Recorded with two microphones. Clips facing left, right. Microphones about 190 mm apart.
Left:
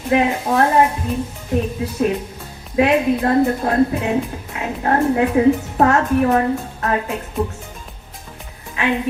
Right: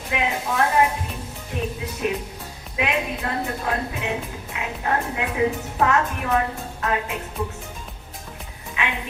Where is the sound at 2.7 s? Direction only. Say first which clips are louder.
Left 10 dB; 40° left (ahead or behind).